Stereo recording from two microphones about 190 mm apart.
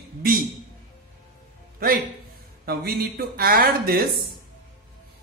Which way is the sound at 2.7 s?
55° right (ahead or behind).